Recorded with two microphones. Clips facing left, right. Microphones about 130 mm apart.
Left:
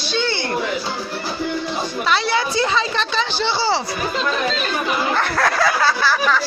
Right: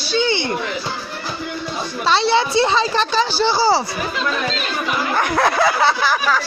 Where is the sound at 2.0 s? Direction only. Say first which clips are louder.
Right 5 dB; 30° right (ahead or behind).